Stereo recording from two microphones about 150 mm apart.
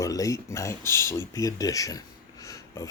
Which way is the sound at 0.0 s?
20° left (ahead or behind).